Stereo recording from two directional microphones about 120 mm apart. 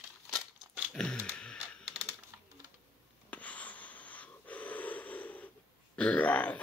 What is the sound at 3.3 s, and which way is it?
Wheeze, 10° left (ahead or behind).